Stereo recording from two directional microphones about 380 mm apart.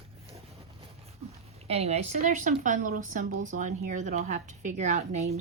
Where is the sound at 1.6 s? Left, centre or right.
Centre.